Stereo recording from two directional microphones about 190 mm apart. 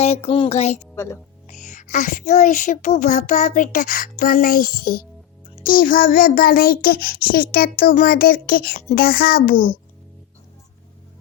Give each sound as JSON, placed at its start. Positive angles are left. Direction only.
{"t": 0.0, "sound": "speech", "side_deg": 35}
{"t": 0.9, "sound": "speech", "side_deg": 15}
{"t": 1.5, "sound": "a child's voice", "side_deg": 40}